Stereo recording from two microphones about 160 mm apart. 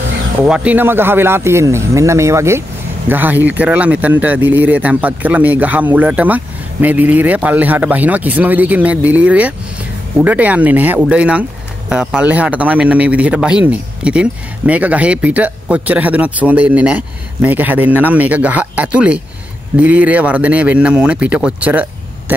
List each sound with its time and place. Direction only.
0.4 s speech: 10° right (ahead or behind)